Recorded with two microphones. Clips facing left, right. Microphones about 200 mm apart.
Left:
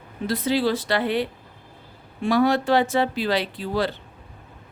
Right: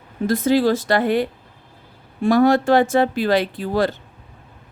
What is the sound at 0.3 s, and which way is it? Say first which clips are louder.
A woman's voice: right 5 dB; 45° right (ahead or behind).